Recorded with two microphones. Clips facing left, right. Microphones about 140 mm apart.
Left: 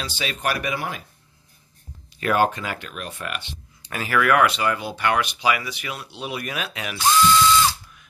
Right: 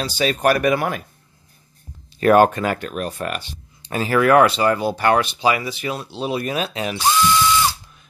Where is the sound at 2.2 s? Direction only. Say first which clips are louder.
Right 7 dB; 45° right (ahead or behind); by 6.9 s 30° right (ahead or behind).